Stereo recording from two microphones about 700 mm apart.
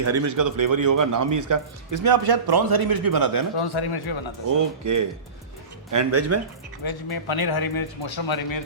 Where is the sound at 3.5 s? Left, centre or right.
Left.